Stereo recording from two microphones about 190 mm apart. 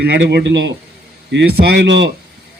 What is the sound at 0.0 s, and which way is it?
A man's voice, 60° right (ahead or behind).